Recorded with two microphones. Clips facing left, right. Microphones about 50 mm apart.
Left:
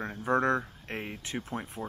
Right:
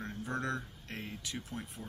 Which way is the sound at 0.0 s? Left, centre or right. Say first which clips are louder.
Left 10 dB; left.